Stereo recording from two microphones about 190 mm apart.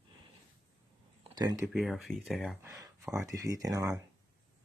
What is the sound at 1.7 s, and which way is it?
Speech, centre (ahead or behind).